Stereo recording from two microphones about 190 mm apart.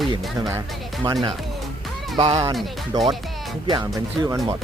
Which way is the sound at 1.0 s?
25° right (ahead or behind).